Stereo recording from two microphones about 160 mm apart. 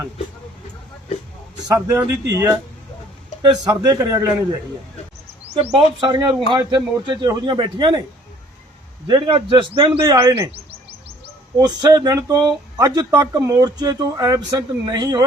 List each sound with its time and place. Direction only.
1.6 s speech: 20° right (ahead or behind)
5.5 s speech: 35° right (ahead or behind)
9.0 s speech: 30° right (ahead or behind)
10.1 s speech: 20° right (ahead or behind)
11.5 s speech: 25° right (ahead or behind)